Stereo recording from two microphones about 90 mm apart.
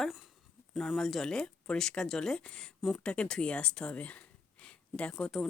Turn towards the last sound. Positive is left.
turn(degrees=10)  # may be behind; listen again after turning